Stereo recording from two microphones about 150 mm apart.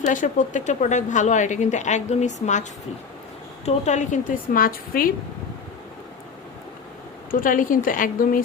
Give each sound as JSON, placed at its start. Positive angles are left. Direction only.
{"t": 0.0, "sound": "a woman's voice", "side_deg": 60}
{"t": 3.7, "sound": "a woman's voice", "side_deg": 50}
{"t": 7.3, "sound": "a woman's voice", "side_deg": 65}